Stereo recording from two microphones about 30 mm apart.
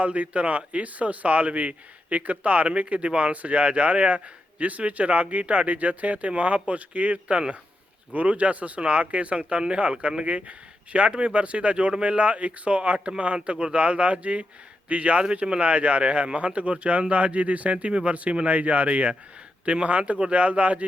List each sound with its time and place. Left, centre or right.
0.0 s speech: right